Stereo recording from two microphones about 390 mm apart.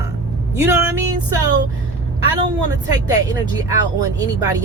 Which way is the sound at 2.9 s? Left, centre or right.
Centre.